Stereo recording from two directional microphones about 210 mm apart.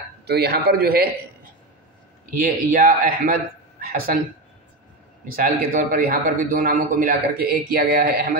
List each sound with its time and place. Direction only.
0.3 s a man's voice: 50° right (ahead or behind)
2.3 s a man's voice: 45° right (ahead or behind)
5.3 s a man's voice: 45° right (ahead or behind)